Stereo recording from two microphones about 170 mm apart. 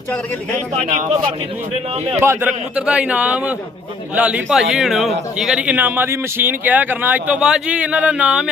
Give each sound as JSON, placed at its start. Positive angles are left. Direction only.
{"t": 0.8, "sound": "a man's voice", "side_deg": -45}
{"t": 2.2, "sound": "speech", "side_deg": -15}